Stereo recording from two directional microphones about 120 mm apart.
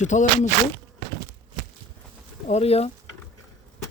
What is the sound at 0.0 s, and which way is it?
Speech, 90° left.